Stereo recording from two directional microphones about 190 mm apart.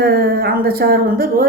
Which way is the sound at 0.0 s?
55° right (ahead or behind).